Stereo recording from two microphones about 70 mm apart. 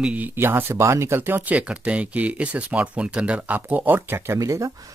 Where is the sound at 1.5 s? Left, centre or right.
Centre; by 4.4 s right.